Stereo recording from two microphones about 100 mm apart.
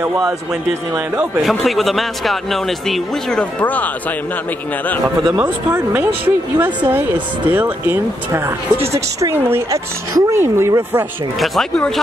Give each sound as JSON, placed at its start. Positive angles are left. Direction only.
{"t": 0.0, "sound": "speech", "side_deg": -25}
{"t": 1.4, "sound": "speech", "side_deg": 0}
{"t": 5.4, "sound": "speech", "side_deg": -20}
{"t": 11.3, "sound": "speech", "side_deg": 0}